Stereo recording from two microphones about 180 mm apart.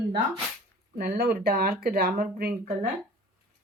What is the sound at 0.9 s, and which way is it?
Speech, 60° right (ahead or behind).